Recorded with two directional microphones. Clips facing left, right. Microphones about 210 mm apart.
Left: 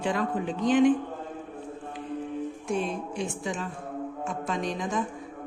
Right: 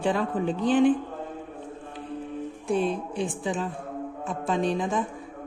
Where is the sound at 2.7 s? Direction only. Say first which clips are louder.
Right 5 dB; 35° right (ahead or behind).